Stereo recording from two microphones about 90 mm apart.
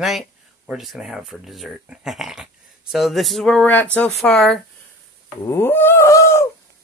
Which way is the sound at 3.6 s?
15° left (ahead or behind).